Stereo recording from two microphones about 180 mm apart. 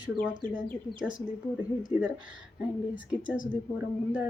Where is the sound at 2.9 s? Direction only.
50° left (ahead or behind).